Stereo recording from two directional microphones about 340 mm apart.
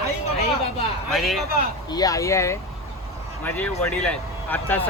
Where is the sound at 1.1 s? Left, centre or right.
Centre.